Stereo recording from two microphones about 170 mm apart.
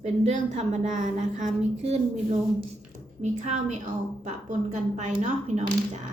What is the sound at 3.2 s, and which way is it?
A woman's voice, 45° right (ahead or behind).